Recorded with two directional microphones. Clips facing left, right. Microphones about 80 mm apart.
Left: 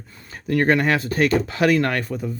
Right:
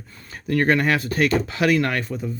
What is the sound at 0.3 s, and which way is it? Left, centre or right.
Speech, left.